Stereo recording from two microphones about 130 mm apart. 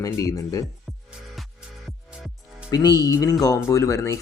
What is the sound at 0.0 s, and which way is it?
Speech, 25° left (ahead or behind).